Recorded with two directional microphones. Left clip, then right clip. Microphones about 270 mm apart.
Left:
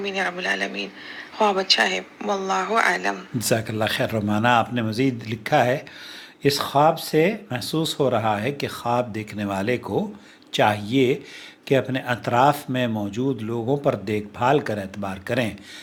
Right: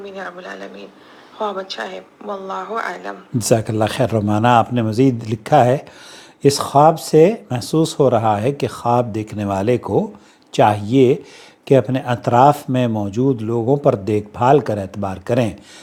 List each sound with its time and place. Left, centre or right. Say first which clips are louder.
0.0 s a woman's voice: left 5 dB; left
3.3 s speech: right 11 dB; right